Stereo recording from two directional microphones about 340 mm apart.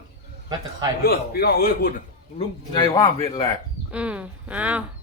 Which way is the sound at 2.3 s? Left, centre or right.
Centre.